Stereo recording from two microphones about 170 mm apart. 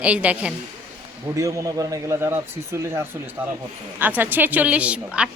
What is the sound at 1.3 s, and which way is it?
A woman's voice, 20° right (ahead or behind).